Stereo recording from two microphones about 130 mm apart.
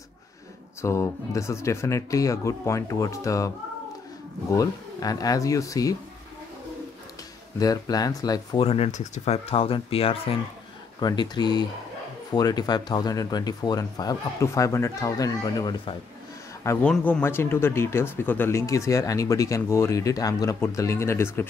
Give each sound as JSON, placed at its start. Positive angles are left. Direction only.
{"t": 0.7, "sound": "speech", "side_deg": 20}
{"t": 7.5, "sound": "speech", "side_deg": 30}
{"t": 8.5, "sound": "speech", "side_deg": 50}
{"t": 11.0, "sound": "speech", "side_deg": 35}
{"t": 16.8, "sound": "speech", "side_deg": 10}